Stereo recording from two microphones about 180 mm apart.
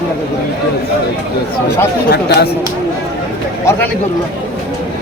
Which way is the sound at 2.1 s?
65° left (ahead or behind).